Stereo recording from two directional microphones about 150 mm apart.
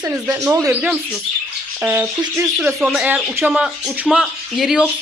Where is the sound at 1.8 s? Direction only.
15° right (ahead or behind).